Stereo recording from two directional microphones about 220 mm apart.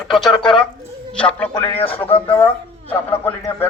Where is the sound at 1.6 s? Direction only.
25° left (ahead or behind).